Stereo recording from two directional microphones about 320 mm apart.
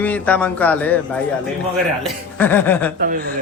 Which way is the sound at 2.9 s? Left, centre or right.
Right.